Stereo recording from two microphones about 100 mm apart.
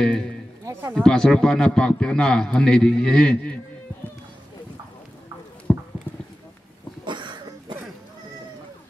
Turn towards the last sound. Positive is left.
turn(degrees=-50)  # may be behind; listen again after turning